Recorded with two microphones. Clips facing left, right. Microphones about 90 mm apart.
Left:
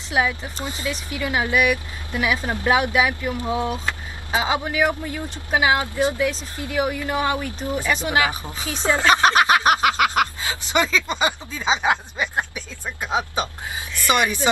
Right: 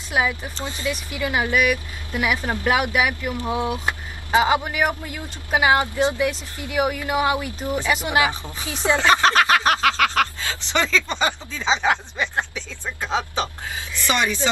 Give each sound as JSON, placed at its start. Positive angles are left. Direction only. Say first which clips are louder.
{"t": 0.1, "sound": "speech", "louder": "left 1 dB", "side_deg": -5}
{"t": 0.6, "sound": "speech", "louder": "right 1 dB", "side_deg": 15}
{"t": 1.1, "sound": "speech", "louder": "even", "side_deg": -15}
{"t": 1.5, "sound": "speech", "louder": "left 1 dB", "side_deg": 20}
{"t": 2.1, "sound": "speech", "louder": "even", "side_deg": -15}
{"t": 3.0, "sound": "speech", "louder": "left 1 dB", "side_deg": 20}
{"t": 3.4, "sound": "speech", "louder": "right 1 dB", "side_deg": -15}
{"t": 4.4, "sound": "speech", "louder": "right 2 dB", "side_deg": -5}
{"t": 8.3, "sound": "speech", "louder": "left 1 dB", "side_deg": 20}
{"t": 8.9, "sound": "a sound", "louder": "even", "side_deg": 15}
{"t": 10.7, "sound": "speech", "louder": "left 1 dB", "side_deg": 15}